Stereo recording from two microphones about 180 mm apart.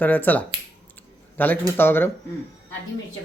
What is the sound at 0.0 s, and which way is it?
Speech, 10° left (ahead or behind).